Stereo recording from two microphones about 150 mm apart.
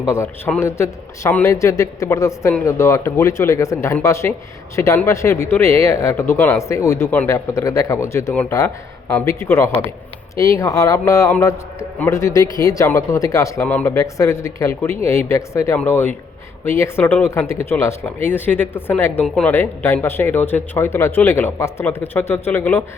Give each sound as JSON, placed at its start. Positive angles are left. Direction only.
{"t": 0.0, "sound": "speech", "side_deg": 20}
{"t": 13.7, "sound": "speech", "side_deg": 10}
{"t": 13.9, "sound": "speech", "side_deg": 20}